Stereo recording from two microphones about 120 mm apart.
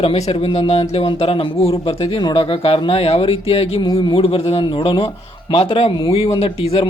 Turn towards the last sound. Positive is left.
turn(degrees=50)  # may be behind; listen again after turning